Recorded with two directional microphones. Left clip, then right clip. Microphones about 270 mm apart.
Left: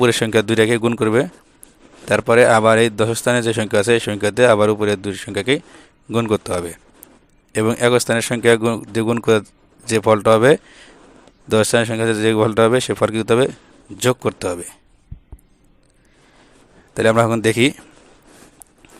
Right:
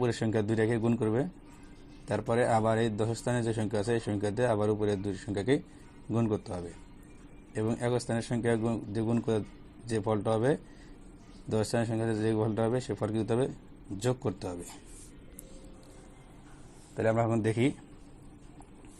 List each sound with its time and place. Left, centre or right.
0.0 s a man's voice: left
5.4 s a man's voice: left
6.1 s a man's voice: left
16.9 s a man's voice: left